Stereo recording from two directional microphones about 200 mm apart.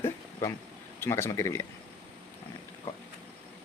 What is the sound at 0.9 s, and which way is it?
Speech, 10° left (ahead or behind).